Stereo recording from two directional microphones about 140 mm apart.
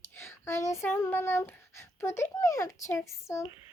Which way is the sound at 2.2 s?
20° left (ahead or behind).